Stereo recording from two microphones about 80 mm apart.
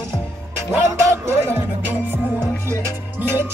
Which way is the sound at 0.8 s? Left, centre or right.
Right.